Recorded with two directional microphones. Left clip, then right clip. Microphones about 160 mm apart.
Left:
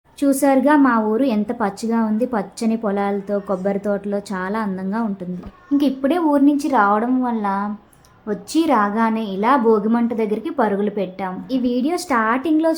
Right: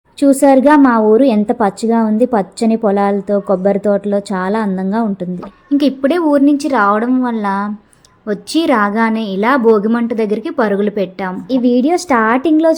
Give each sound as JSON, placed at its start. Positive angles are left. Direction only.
{"t": 0.2, "sound": "a woman's voice", "side_deg": -20}
{"t": 5.7, "sound": "a woman's voice", "side_deg": -30}